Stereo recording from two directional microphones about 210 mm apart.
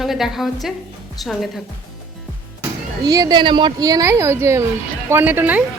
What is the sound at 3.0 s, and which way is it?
A woman's voice, 20° right (ahead or behind).